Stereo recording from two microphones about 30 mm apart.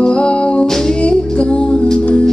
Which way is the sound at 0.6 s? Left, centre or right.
Centre.